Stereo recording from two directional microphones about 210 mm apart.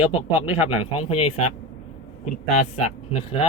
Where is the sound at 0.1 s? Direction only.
25° left (ahead or behind).